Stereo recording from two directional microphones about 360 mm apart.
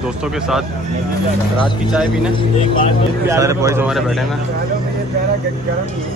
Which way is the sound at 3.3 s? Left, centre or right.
Centre.